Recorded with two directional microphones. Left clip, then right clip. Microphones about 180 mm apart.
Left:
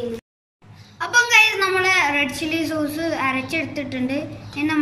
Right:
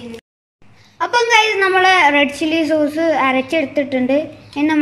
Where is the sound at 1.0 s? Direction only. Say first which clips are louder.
Right 2 dB; 40° right (ahead or behind).